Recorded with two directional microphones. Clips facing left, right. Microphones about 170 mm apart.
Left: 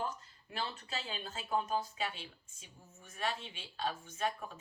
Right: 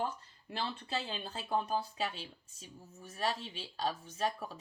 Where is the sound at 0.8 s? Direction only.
30° right (ahead or behind).